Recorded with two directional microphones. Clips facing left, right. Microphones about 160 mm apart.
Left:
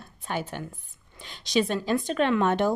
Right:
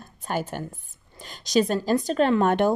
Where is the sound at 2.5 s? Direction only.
55° right (ahead or behind).